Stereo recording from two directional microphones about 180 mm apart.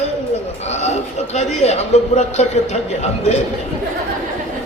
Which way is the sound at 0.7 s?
40° left (ahead or behind).